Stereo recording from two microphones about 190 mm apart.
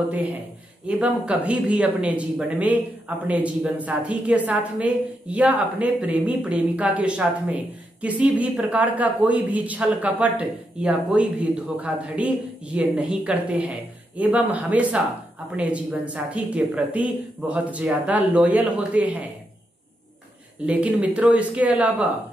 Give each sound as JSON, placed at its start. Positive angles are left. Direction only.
{"t": 0.8, "sound": "a woman's voice", "side_deg": -5}
{"t": 20.6, "sound": "a woman's voice", "side_deg": -5}